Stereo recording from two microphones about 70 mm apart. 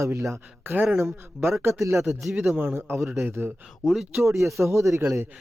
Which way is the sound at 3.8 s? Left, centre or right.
Centre.